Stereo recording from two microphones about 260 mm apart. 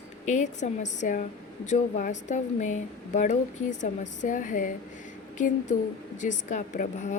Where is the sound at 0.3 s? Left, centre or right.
Left.